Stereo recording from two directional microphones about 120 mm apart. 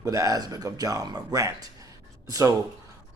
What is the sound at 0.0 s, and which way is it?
Speech, 30° right (ahead or behind).